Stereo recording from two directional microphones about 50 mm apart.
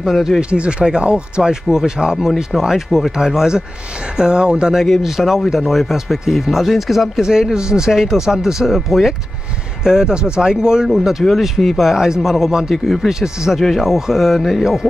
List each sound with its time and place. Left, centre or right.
0.0 s speech: centre
0.4 s speech: right
4.7 s speech: centre
13.1 s speech: centre
13.6 s speech: centre